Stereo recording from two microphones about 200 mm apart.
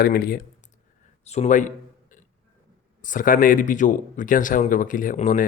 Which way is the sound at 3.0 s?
40° left (ahead or behind).